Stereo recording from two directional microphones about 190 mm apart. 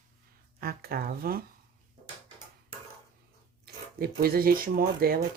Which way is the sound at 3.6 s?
55° right (ahead or behind).